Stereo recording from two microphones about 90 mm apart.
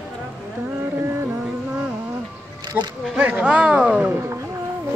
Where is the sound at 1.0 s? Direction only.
30° right (ahead or behind).